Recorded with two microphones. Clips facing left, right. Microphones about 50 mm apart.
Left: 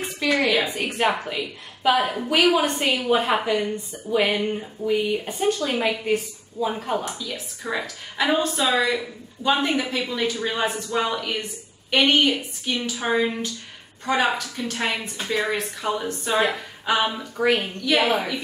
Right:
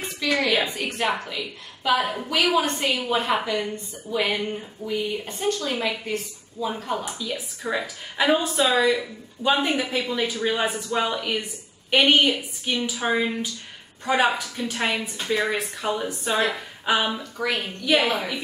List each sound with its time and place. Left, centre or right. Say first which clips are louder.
0.2 s a woman's voice: left 1 dB; centre
7.2 s a woman's voice: right 2 dB; centre
14.0 s a woman's voice: right 1 dB; centre
15.0 s speech: right 1 dB; centre
17.2 s speech: left 6 dB; centre
17.7 s speech: even; centre